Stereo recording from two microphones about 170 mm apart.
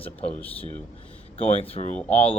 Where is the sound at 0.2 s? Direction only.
35° left (ahead or behind).